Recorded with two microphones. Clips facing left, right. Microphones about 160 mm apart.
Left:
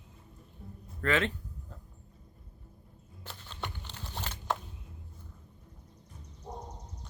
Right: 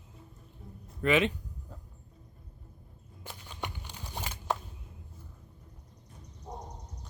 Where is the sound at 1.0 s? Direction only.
15° right (ahead or behind).